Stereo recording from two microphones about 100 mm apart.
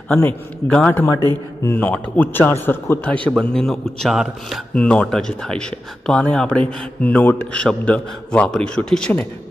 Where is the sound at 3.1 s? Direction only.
10° left (ahead or behind).